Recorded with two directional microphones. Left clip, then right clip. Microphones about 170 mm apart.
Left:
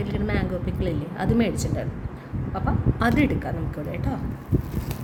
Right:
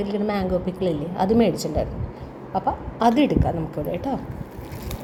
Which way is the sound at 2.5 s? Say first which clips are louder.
Right 4 dB; 15° right (ahead or behind).